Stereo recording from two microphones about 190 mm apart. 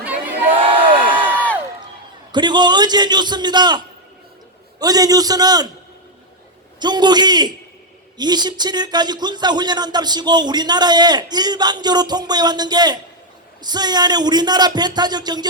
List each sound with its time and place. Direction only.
0.0 s crowd: 10° right (ahead or behind)
0.5 s a sound: 25° right (ahead or behind)
2.3 s speech: 25° right (ahead or behind)
6.7 s speech: 25° right (ahead or behind)